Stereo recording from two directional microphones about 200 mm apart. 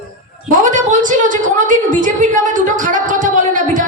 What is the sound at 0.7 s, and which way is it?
A woman's voice, 40° right (ahead or behind).